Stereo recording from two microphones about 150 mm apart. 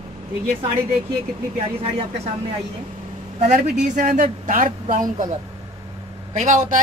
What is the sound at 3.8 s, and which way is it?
Speech, 60° right (ahead or behind).